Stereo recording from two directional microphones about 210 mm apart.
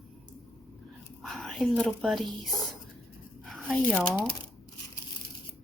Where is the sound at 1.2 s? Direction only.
Centre (ahead or behind).